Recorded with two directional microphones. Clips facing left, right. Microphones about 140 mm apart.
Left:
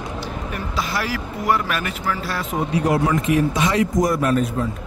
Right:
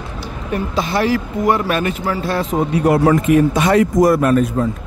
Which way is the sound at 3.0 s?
45° right (ahead or behind).